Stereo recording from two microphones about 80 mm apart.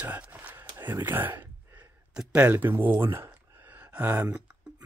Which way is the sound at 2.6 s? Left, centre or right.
Right.